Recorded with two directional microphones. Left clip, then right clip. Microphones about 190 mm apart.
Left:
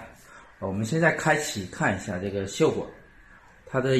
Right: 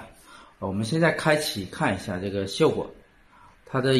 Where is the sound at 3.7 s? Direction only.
15° right (ahead or behind).